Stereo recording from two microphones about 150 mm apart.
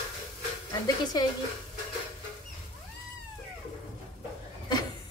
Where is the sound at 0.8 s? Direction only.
25° left (ahead or behind).